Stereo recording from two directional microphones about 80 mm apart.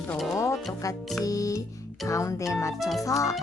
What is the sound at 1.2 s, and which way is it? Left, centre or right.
Speech, left.